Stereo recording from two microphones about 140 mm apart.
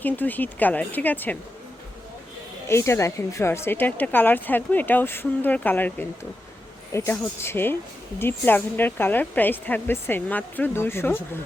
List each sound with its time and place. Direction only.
0.0 s speech: 10° left (ahead or behind)
2.6 s speech: 20° left (ahead or behind)